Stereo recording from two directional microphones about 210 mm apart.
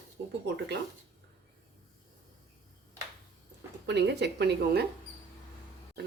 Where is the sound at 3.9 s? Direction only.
55° right (ahead or behind).